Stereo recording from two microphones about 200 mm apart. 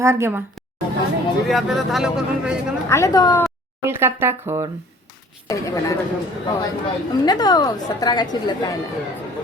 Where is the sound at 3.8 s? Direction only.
10° right (ahead or behind).